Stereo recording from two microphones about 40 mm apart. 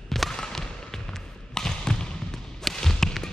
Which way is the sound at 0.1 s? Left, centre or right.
Centre.